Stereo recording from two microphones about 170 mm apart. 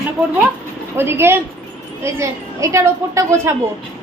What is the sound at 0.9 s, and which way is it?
A woman's voice, 15° right (ahead or behind).